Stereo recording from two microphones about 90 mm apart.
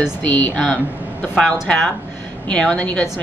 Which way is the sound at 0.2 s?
20° left (ahead or behind).